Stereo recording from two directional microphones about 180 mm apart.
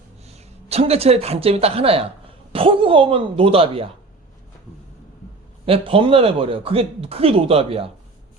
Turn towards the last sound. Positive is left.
turn(degrees=-30)  # may be behind; listen again after turning